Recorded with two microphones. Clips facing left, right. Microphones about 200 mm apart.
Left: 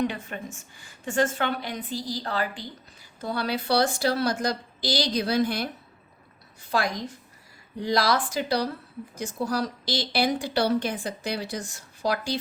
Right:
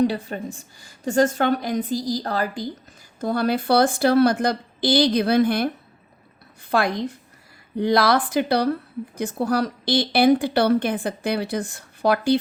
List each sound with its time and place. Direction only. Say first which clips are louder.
0.0 s a woman's voice: right 7 dB; 35° right (ahead or behind); by 12.4 s 60° right (ahead or behind)